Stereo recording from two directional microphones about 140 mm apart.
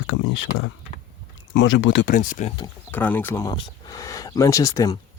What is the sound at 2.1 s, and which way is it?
Speech, 70° left (ahead or behind).